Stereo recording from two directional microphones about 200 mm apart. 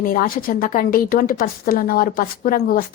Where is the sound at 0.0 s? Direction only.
45° left (ahead or behind).